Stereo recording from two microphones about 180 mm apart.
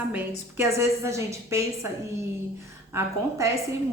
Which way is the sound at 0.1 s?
10° right (ahead or behind).